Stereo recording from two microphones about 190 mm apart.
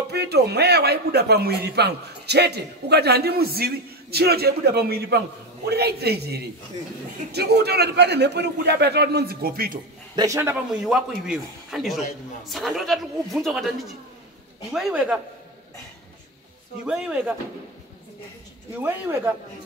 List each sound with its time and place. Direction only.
0.1 s a man's voice: 60° right (ahead or behind)
10.1 s a man's voice: 15° right (ahead or behind)
16.8 s speech: 5° right (ahead or behind)
18.8 s speech: 10° right (ahead or behind)